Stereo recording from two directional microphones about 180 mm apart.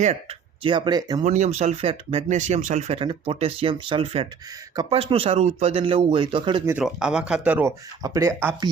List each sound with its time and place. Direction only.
0.0 s speech: 35° right (ahead or behind)
1.2 s speech: 40° right (ahead or behind)
6.7 s speech: 5° right (ahead or behind)